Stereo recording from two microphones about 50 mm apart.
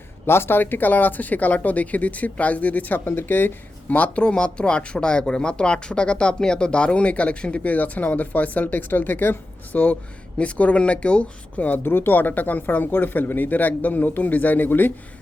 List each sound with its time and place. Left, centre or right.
0.3 s speech: left
3.0 s speech: left
3.8 s speech: left
10.3 s speech: left
11.8 s speech: left